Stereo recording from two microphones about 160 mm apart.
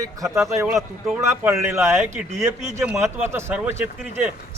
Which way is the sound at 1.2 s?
15° right (ahead or behind).